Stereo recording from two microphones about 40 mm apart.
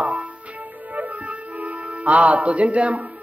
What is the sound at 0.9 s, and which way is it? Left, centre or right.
Music, right.